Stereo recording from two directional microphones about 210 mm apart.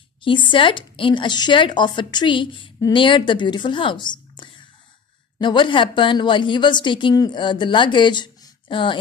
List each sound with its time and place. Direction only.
0.2 s speech: 25° left (ahead or behind)